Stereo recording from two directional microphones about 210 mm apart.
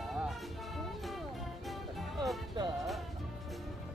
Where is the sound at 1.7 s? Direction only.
Centre (ahead or behind).